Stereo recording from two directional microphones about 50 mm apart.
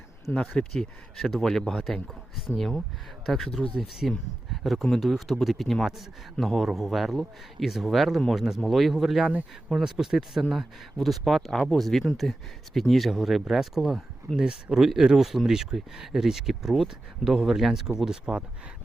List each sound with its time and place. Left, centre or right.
0.3 s speech: centre
1.1 s speech: centre
1.8 s speech: centre
14.3 s speech: centre